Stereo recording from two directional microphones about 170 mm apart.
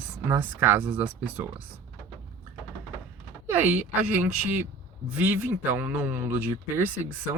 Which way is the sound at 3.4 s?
10° right (ahead or behind).